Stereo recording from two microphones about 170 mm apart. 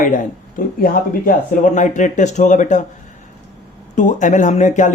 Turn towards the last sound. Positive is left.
turn(degrees=45)  # may be behind; listen again after turning